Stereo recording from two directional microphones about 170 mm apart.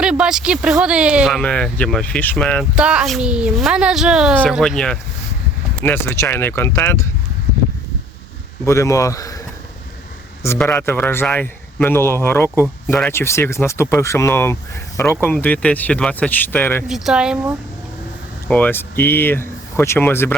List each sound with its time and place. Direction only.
0.0 s speech: 5° right (ahead or behind)
2.7 s a man's voice: 5° right (ahead or behind); by 7.1 s 15° left (ahead or behind)
8.6 s speech: 15° left (ahead or behind)
10.4 s a man's voice: 15° left (ahead or behind)
16.9 s speech: centre (ahead or behind)
18.4 s speech: 10° left (ahead or behind)